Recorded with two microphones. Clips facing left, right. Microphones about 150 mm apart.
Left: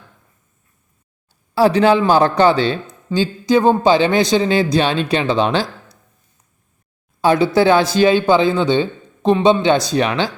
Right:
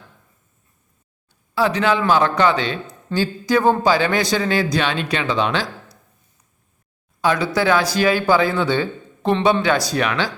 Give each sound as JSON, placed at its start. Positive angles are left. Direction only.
{"t": 1.3, "sound": "speech", "side_deg": 35}
{"t": 3.1, "sound": "speech", "side_deg": 20}
{"t": 7.2, "sound": "speech", "side_deg": 30}